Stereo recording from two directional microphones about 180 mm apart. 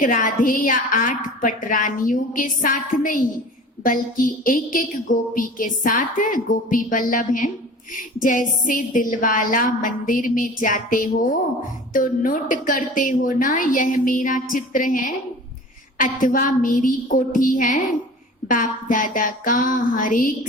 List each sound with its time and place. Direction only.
0.0 s a woman's voice: 50° left (ahead or behind)